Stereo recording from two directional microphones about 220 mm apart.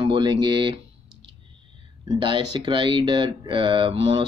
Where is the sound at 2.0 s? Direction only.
20° right (ahead or behind).